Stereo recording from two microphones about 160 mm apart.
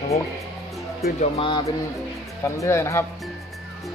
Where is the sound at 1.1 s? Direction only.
35° left (ahead or behind).